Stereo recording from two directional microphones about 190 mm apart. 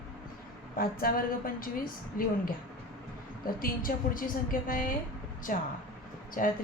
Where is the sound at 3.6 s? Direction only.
50° left (ahead or behind).